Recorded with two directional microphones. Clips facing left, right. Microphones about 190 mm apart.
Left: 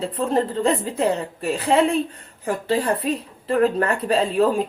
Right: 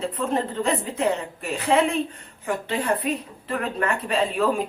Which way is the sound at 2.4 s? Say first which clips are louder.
Left 3 dB; 35° left (ahead or behind).